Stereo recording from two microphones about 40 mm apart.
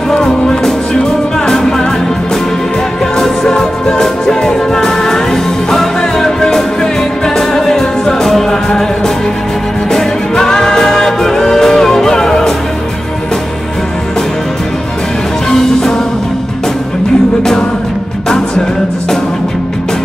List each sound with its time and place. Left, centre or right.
0.1 s music: centre
3.2 s music: centre
17.4 s music: centre